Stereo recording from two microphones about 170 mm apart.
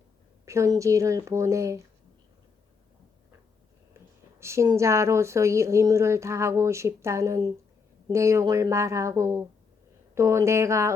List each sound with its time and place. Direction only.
0.4 s speech: 20° right (ahead or behind)
4.4 s speech: 15° right (ahead or behind)